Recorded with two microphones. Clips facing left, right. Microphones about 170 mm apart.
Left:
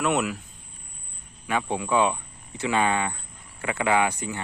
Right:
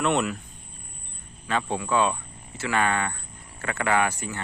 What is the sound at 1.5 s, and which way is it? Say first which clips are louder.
Speech: left 1 dB; 10° left (ahead or behind).